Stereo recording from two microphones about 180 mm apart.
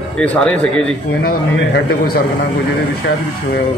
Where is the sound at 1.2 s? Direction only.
55° left (ahead or behind).